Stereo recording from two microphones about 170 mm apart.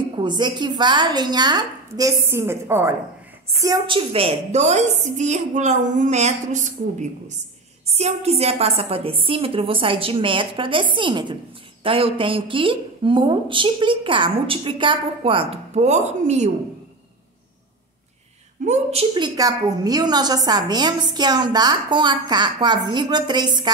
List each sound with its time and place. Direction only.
0.2 s a woman's voice: 25° right (ahead or behind); by 16.5 s 40° right (ahead or behind)
18.7 s a woman's voice: 35° right (ahead or behind)